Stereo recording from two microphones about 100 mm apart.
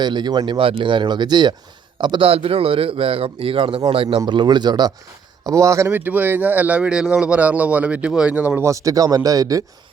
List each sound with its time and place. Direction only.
0.0 s a man's voice: 45° right (ahead or behind); by 4.2 s 65° right (ahead or behind)
4.3 s speech: 50° right (ahead or behind)
5.4 s speech: 35° right (ahead or behind)
5.9 s speech: 15° right (ahead or behind)
8.6 s speech: 35° right (ahead or behind)